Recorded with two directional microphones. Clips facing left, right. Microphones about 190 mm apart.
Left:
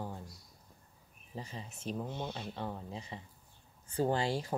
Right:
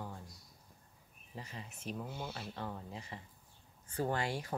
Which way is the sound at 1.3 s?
30° left (ahead or behind).